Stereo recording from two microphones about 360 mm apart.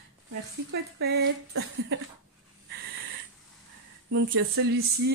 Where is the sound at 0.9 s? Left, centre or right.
Right.